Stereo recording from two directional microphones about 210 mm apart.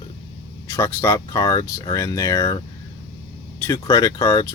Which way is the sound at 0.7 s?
15° left (ahead or behind).